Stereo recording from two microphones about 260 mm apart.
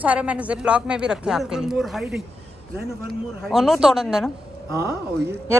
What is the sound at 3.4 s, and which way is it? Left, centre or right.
A woman's voice, centre.